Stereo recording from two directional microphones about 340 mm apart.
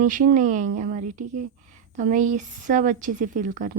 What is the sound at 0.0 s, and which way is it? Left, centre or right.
A woman's voice, right.